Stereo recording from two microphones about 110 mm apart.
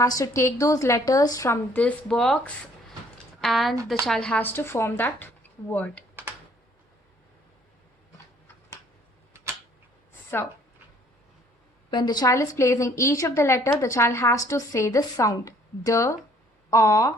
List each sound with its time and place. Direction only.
0.0 s a woman's voice: 25° left (ahead or behind)
1.7 s a woman's voice: 10° left (ahead or behind)
11.9 s a woman's voice: 40° left (ahead or behind)